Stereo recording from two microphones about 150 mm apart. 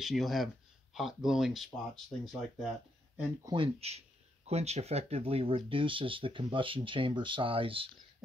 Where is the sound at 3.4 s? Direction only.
35° right (ahead or behind).